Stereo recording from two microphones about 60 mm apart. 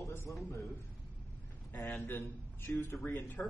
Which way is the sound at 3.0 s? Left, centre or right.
Left.